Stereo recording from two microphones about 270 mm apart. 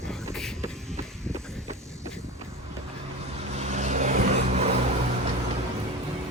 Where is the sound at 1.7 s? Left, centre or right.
Centre.